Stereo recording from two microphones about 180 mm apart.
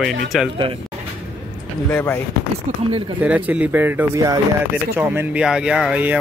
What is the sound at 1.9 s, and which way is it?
Speech, 10° left (ahead or behind).